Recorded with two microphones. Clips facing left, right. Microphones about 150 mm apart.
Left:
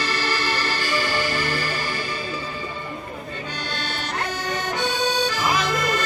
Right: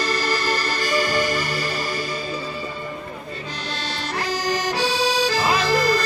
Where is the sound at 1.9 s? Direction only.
40° right (ahead or behind).